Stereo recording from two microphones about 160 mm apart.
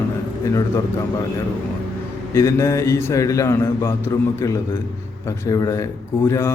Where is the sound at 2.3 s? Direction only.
20° left (ahead or behind).